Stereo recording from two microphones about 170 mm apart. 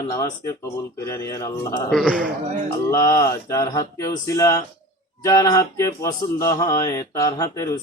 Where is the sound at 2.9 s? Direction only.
20° left (ahead or behind).